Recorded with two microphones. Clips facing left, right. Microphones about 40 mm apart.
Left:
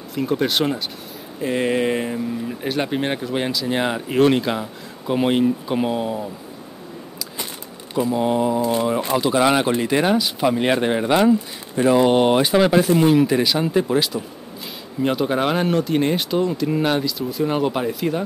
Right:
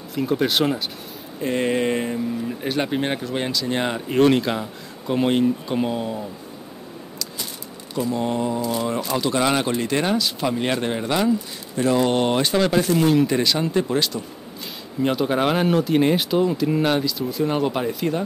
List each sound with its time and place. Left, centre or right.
0.1 s speech: centre
7.9 s speech: centre
9.1 s speech: centre